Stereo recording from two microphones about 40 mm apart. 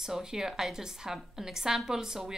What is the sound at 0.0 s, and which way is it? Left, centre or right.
Speech, centre.